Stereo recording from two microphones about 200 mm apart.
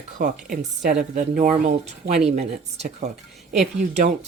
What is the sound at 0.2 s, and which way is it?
Speech, 45° right (ahead or behind).